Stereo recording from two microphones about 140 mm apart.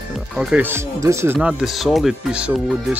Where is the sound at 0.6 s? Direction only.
15° right (ahead or behind).